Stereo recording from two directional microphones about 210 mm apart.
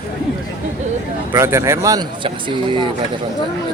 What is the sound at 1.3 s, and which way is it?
Speech, 10° right (ahead or behind).